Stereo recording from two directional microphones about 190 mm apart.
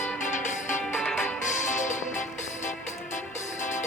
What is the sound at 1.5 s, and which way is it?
Music, 40° left (ahead or behind).